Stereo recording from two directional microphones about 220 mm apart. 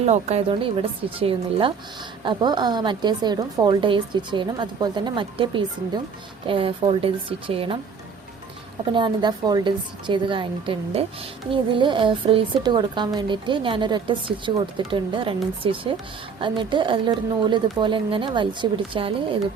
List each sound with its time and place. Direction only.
0.0 s speech: 30° right (ahead or behind)
9.0 s speech: 20° right (ahead or behind)